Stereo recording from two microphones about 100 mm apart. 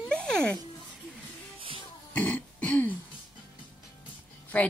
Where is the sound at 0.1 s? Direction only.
10° left (ahead or behind).